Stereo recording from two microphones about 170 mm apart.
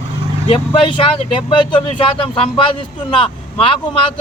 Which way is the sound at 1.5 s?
30° left (ahead or behind).